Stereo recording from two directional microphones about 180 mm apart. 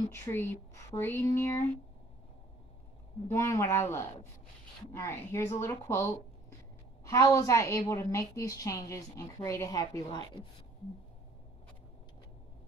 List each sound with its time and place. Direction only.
0.1 s a woman's voice: 15° left (ahead or behind)
3.3 s a woman's voice: 15° left (ahead or behind)